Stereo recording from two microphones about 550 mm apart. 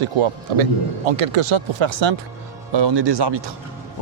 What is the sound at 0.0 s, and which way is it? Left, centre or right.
Speech, right.